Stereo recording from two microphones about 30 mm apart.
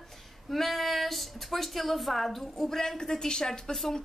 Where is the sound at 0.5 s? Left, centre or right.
Centre.